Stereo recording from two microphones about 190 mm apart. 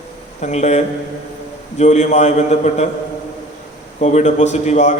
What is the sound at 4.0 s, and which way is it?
Speech, 40° left (ahead or behind).